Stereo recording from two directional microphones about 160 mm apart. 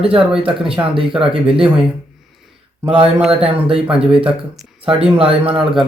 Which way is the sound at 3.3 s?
35° right (ahead or behind).